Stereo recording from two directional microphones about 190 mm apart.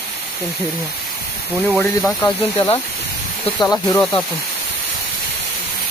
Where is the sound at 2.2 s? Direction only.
20° left (ahead or behind).